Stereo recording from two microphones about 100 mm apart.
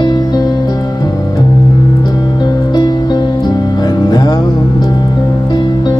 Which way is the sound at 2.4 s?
45° left (ahead or behind).